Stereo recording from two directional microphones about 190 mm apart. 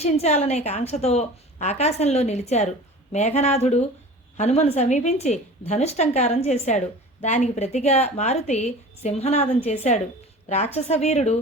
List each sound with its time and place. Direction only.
0.0 s a woman's voice: 35° left (ahead or behind)